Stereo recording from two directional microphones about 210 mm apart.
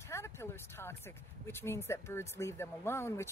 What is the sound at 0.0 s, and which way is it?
A woman's voice, 10° left (ahead or behind).